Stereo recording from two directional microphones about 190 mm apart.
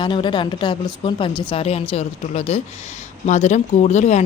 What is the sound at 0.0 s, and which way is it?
A woman's voice, 25° left (ahead or behind).